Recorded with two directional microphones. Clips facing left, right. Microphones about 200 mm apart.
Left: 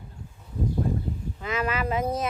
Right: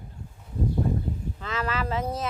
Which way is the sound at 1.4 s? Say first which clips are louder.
Left 3 dB; 15° left (ahead or behind).